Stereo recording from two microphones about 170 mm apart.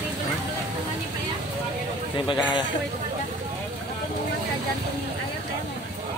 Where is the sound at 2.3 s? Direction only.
25° left (ahead or behind).